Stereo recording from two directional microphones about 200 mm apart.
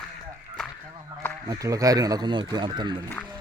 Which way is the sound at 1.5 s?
15° right (ahead or behind).